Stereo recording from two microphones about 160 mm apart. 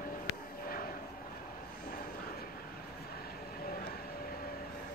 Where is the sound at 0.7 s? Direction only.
65° left (ahead or behind).